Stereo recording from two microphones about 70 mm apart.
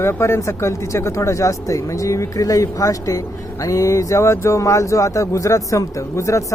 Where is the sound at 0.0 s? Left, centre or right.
Left.